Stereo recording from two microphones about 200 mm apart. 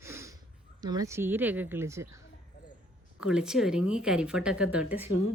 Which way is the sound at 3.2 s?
5° right (ahead or behind).